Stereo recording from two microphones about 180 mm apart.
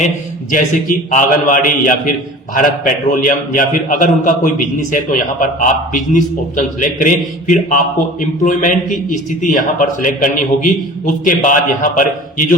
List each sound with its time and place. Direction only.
0.5 s a man's voice: 45° left (ahead or behind)